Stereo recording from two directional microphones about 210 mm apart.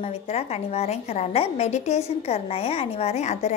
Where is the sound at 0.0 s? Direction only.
30° left (ahead or behind).